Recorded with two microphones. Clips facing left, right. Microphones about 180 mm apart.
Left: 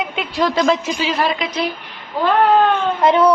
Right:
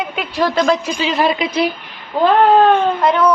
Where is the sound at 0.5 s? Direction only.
25° left (ahead or behind).